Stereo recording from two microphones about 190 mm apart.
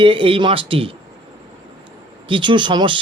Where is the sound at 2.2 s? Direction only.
25° right (ahead or behind).